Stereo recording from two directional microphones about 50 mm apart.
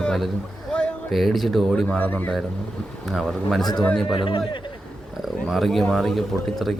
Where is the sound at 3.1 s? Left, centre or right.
Centre.